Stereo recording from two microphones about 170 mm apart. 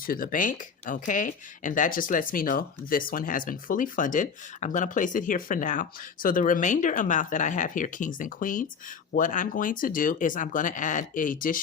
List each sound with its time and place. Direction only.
0.0 s speech: 55° left (ahead or behind)